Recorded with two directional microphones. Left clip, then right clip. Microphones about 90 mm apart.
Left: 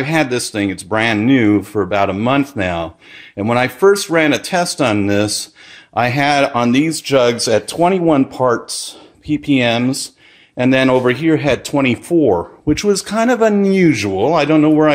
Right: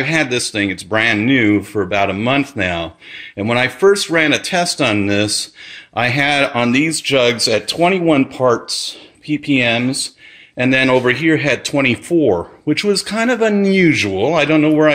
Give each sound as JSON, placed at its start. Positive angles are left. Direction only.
{"t": 0.0, "sound": "speech", "side_deg": 25}